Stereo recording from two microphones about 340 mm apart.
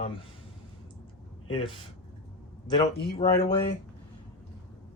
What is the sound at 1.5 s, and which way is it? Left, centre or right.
Speech, centre.